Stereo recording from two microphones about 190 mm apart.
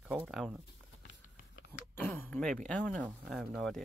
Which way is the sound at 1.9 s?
10° left (ahead or behind).